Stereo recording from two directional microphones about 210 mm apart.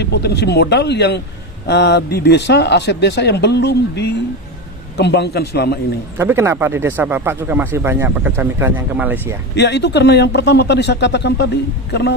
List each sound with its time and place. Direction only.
0.0 s speech: 50° left (ahead or behind)
6.1 s speech: 10° right (ahead or behind)
9.6 s speech: 55° left (ahead or behind)